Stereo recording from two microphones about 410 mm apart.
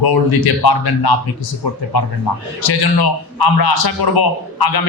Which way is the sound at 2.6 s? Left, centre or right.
Left.